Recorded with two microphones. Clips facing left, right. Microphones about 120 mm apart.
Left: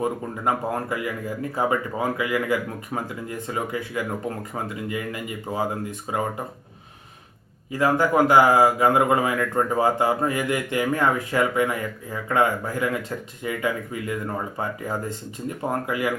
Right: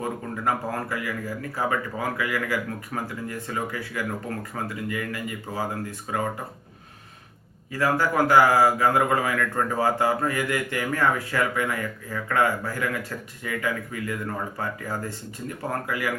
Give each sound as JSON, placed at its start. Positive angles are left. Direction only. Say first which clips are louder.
{"t": 0.0, "sound": "a man's voice", "louder": "left 3 dB", "side_deg": 20}
{"t": 7.7, "sound": "a man's voice", "louder": "left 3 dB", "side_deg": 20}